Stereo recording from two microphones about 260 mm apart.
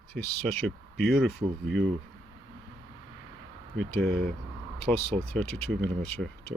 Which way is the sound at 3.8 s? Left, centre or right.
Centre.